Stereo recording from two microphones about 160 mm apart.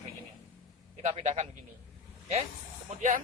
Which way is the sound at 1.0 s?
45° right (ahead or behind).